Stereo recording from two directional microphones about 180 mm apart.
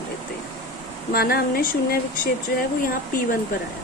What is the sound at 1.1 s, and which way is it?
Speech, 55° left (ahead or behind).